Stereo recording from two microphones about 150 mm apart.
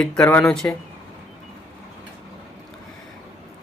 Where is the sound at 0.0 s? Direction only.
5° left (ahead or behind).